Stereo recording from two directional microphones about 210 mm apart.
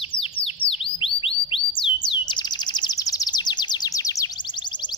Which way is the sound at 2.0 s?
20° left (ahead or behind).